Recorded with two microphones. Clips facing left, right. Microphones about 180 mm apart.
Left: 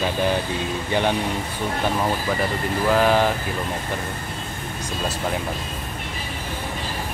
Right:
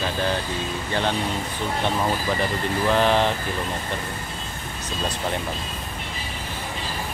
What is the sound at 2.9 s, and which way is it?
Speech, 5° left (ahead or behind).